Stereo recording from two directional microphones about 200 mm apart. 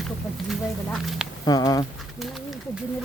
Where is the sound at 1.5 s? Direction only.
20° left (ahead or behind).